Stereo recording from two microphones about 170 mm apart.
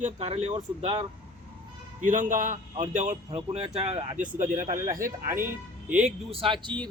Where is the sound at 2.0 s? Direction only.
50° right (ahead or behind).